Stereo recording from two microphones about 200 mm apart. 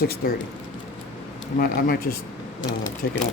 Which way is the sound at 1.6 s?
45° left (ahead or behind).